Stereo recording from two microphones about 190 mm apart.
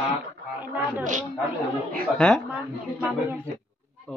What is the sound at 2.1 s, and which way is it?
Speech, 5° left (ahead or behind).